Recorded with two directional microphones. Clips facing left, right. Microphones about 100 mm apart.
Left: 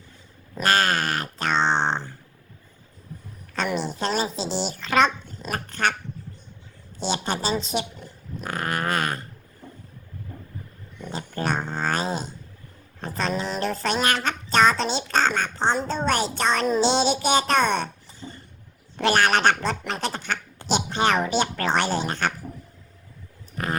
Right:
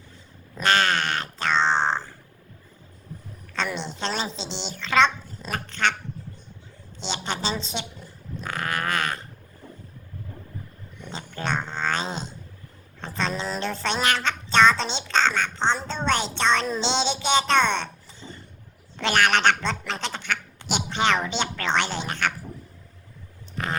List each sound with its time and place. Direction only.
0.5 s a sound: 10° left (ahead or behind)
4.0 s a woman's voice: 10° left (ahead or behind)
4.3 s speech: 25° right (ahead or behind)
4.8 s a child's voice: 5° left (ahead or behind)
5.4 s dog: 10° left (ahead or behind)
7.3 s speech: 10° left (ahead or behind)
8.4 s dog: 15° left (ahead or behind)
11.0 s dog: 5° left (ahead or behind)
13.0 s a sound: 5° left (ahead or behind)
18.9 s speech: 15° left (ahead or behind)